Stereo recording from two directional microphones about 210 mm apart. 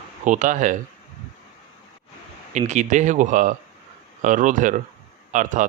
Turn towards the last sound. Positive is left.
turn(degrees=-35)  # may be behind; listen again after turning